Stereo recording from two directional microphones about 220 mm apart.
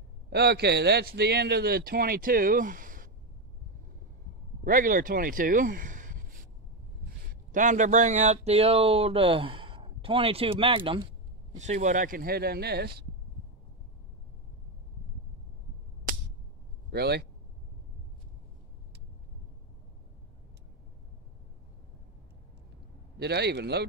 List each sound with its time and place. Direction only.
0.3 s speech: 50° right (ahead or behind)
4.6 s speech: 40° right (ahead or behind)
7.5 s speech: 35° right (ahead or behind)
11.5 s speech: 35° right (ahead or behind)
16.9 s speech: 45° right (ahead or behind)
23.1 s speech: 50° right (ahead or behind)